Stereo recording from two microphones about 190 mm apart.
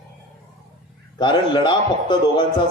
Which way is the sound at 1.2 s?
25° left (ahead or behind).